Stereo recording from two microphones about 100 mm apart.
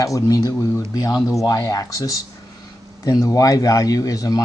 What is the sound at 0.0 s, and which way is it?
Speech, 35° left (ahead or behind).